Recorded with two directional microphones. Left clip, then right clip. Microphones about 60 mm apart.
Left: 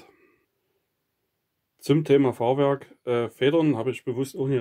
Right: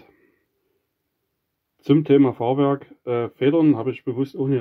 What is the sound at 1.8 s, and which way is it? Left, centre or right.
Speech, centre.